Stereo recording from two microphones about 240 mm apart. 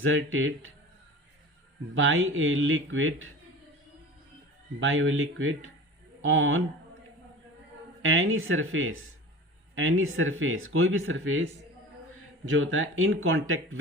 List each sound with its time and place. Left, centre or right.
0.0 s speech: right
2.0 s speech: right
4.8 s speech: right
8.0 s speech: right
12.5 s speech: right